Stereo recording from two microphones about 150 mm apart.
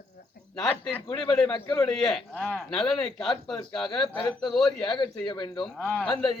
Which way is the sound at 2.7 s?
35° left (ahead or behind).